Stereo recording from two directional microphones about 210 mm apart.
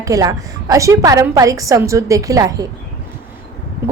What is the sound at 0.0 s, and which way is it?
A woman's voice, 15° right (ahead or behind).